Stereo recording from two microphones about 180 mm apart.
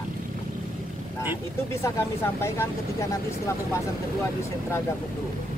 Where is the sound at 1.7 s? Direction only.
15° left (ahead or behind).